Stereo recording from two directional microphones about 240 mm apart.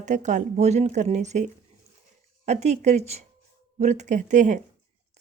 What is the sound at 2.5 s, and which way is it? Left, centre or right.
Speech, right.